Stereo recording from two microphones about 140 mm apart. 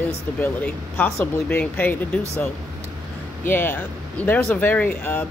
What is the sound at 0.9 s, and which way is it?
Speech, 15° left (ahead or behind).